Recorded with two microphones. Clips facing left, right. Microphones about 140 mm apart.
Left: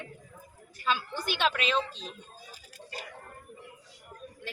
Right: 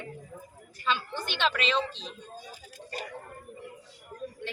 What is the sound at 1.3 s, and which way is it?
Speech, 10° left (ahead or behind).